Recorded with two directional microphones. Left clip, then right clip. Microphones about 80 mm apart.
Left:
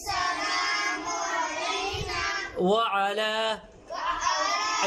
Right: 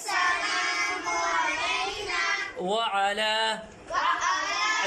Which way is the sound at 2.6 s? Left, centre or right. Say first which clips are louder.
Left 2 dB; centre.